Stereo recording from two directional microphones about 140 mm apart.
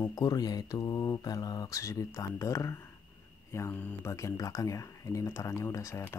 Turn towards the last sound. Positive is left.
turn(degrees=20)  # may be behind; listen again after turning